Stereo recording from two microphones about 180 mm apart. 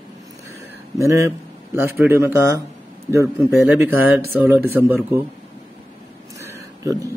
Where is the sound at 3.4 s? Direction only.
10° right (ahead or behind).